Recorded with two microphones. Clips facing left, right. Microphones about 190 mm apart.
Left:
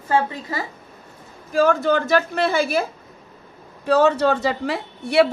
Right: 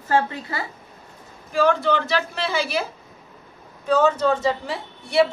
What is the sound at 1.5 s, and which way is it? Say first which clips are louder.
A man's voice: left 2 dB; 45° left (ahead or behind).